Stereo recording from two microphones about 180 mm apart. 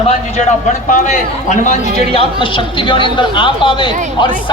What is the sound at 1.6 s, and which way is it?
Speech, 45° left (ahead or behind).